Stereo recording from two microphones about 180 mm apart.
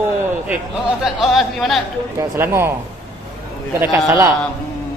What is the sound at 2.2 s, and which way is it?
Speech, 15° right (ahead or behind).